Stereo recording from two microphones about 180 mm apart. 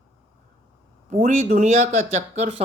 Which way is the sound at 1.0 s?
40° right (ahead or behind).